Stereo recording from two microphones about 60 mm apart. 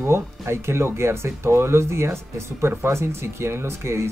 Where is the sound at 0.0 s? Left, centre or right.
Right.